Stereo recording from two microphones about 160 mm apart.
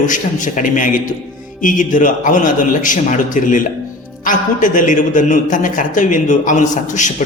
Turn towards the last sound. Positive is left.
turn(degrees=50)  # may be behind; listen again after turning